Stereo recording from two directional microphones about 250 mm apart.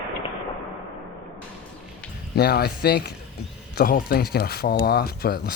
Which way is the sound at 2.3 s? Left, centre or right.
Left.